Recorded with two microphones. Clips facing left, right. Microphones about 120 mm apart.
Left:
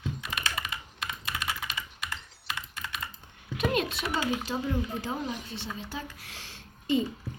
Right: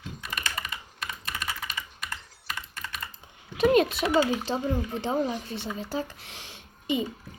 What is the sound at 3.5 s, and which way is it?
Speech, 40° right (ahead or behind).